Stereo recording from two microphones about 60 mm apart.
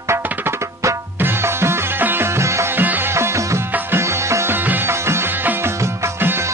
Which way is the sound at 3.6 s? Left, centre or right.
Right.